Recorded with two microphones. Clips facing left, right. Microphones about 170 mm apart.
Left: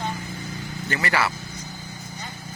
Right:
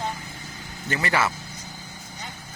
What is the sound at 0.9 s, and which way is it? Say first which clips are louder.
Speech: even; 20° right (ahead or behind).